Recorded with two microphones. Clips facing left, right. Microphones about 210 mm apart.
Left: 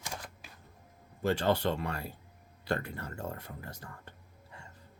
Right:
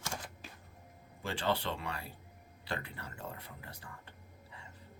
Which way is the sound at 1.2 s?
45° left (ahead or behind).